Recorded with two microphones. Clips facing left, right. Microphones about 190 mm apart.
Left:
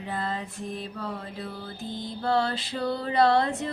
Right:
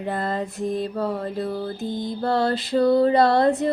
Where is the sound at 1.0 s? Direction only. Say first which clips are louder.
Right 10 dB; 45° right (ahead or behind).